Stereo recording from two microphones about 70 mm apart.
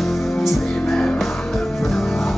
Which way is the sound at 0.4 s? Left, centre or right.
Centre.